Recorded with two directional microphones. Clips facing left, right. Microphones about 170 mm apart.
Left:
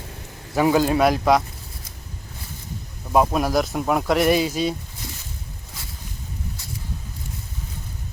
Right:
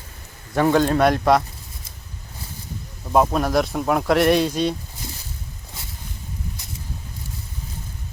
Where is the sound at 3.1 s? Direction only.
5° left (ahead or behind).